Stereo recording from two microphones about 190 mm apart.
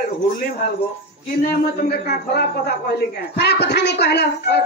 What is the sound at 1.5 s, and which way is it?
A man's voice, 55° left (ahead or behind).